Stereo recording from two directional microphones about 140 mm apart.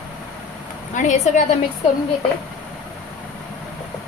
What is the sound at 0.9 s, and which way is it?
Speech, 60° left (ahead or behind).